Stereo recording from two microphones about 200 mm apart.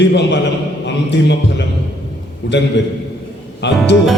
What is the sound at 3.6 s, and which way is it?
Speech, 60° left (ahead or behind).